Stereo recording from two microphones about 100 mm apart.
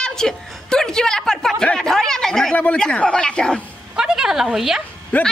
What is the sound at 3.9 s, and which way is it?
Speech, 5° right (ahead or behind).